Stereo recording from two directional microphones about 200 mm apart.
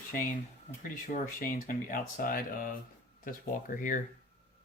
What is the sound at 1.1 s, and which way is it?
Speech, 40° left (ahead or behind).